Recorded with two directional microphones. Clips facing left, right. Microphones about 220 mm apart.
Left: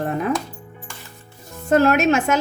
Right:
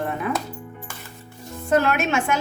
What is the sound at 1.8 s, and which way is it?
Speech, 40° left (ahead or behind).